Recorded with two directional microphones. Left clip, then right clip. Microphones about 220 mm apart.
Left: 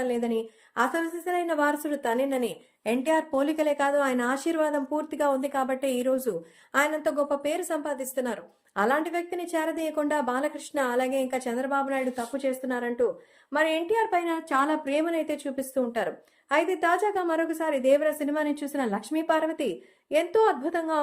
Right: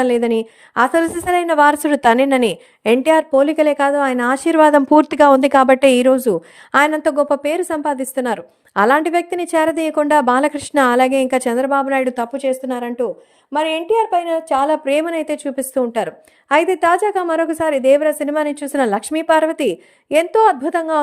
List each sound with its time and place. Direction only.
0.0 s a woman's voice: 45° right (ahead or behind); by 14.8 s 25° right (ahead or behind)
14.8 s a woman's voice: 40° right (ahead or behind)